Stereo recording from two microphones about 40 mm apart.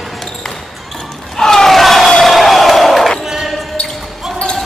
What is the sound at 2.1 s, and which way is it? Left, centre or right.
Crowd, centre.